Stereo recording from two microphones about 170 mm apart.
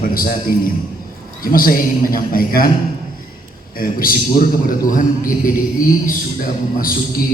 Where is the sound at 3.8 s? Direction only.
60° left (ahead or behind).